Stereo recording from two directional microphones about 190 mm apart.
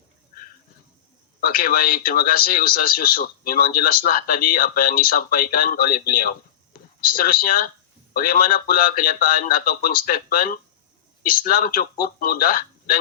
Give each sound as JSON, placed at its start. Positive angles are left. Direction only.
{"t": 1.4, "sound": "speech", "side_deg": 50}